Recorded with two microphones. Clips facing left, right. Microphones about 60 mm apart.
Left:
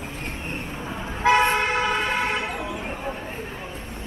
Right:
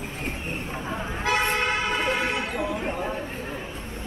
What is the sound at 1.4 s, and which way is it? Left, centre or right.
Vehicle, left.